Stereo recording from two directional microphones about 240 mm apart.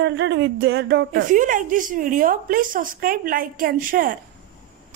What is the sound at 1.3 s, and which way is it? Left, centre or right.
Speech, right.